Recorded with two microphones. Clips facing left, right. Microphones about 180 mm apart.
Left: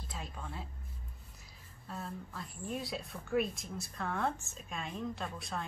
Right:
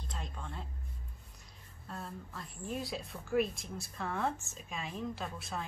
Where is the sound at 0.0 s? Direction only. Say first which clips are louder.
Even; 5° left (ahead or behind).